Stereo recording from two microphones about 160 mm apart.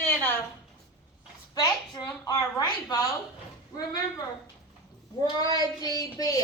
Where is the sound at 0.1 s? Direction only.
10° left (ahead or behind).